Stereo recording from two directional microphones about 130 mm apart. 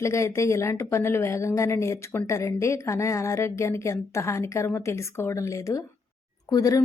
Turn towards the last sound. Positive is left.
turn(degrees=30)  # may be behind; listen again after turning